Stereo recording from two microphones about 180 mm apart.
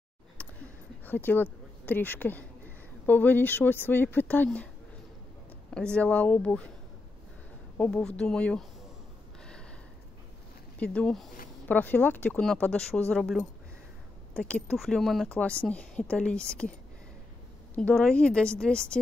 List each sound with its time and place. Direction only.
0.4 s a sound: 5° left (ahead or behind)
1.0 s speech: 10° left (ahead or behind)
5.7 s speech: 5° left (ahead or behind)
7.7 s speech: 5° left (ahead or behind)
9.4 s a sound: 5° left (ahead or behind)
10.8 s speech: 5° left (ahead or behind)
17.7 s speech: 5° left (ahead or behind)